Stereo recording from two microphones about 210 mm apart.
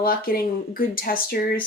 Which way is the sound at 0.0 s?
45° left (ahead or behind).